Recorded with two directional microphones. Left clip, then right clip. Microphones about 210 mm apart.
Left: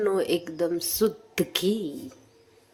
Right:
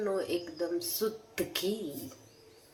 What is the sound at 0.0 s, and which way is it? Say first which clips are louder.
Speech: left 8 dB; 55° left (ahead or behind).